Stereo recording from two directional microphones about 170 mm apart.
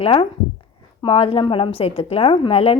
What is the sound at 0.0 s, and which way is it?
A woman's voice, 30° left (ahead or behind).